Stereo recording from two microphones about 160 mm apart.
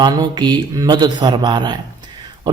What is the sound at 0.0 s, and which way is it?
Speech, 25° right (ahead or behind).